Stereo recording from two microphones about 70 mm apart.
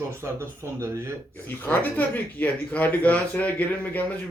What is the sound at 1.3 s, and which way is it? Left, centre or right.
Speech, left.